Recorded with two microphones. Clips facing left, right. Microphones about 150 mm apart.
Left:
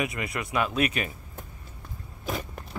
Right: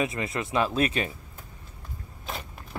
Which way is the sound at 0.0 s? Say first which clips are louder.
Right 2 dB; 30° right (ahead or behind).